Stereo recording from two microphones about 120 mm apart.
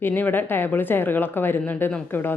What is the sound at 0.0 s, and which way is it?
Speech, 15° left (ahead or behind).